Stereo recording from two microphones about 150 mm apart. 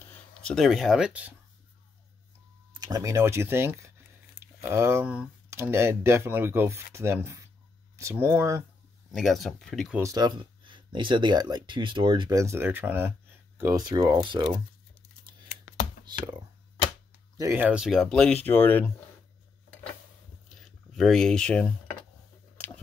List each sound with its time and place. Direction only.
0.4 s speech: 5° left (ahead or behind)
2.7 s speech: 25° right (ahead or behind)
9.1 s speech: centre (ahead or behind)
9.9 s speech: 25° right (ahead or behind)
13.8 s speech: 30° right (ahead or behind)
17.4 s speech: 15° right (ahead or behind); by 18.9 s 15° left (ahead or behind)
20.4 s a sound: centre (ahead or behind)